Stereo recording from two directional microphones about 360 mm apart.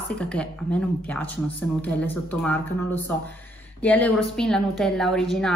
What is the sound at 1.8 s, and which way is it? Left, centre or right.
A woman's voice, centre.